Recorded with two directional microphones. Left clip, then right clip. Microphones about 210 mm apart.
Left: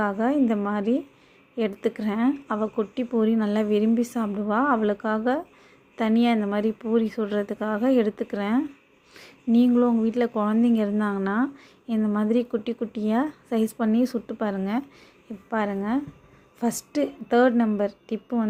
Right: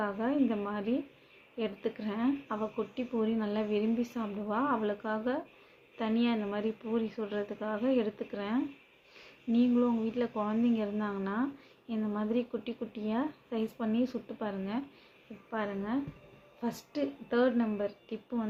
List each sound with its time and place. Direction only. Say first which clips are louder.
0.0 s speech: left 8 dB; 40° left (ahead or behind)